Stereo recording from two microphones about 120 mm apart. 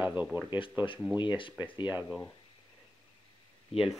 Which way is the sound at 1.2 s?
40° left (ahead or behind).